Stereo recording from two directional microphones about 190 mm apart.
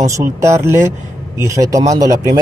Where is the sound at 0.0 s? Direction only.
15° right (ahead or behind).